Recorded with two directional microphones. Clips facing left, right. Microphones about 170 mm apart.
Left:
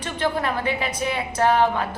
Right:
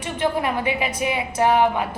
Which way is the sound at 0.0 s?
15° right (ahead or behind).